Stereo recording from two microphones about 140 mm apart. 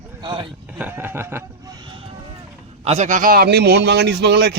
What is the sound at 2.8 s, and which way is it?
Speech, 55° right (ahead or behind).